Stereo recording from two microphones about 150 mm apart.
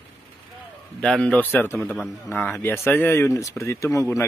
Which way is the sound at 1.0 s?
5° left (ahead or behind).